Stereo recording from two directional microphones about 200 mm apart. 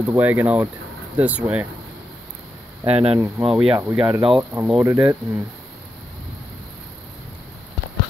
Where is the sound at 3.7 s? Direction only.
10° right (ahead or behind).